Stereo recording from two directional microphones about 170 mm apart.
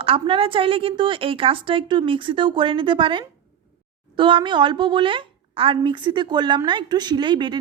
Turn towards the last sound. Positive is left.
turn(degrees=-30)  # may be behind; listen again after turning